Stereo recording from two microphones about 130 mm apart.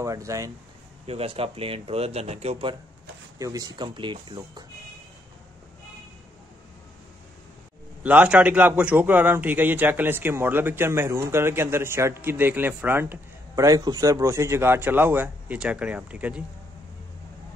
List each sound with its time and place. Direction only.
0.0 s speech: 25° right (ahead or behind)
1.0 s speech: 50° right (ahead or behind)
3.3 s speech: 25° right (ahead or behind)
8.0 s a man's voice: 10° right (ahead or behind)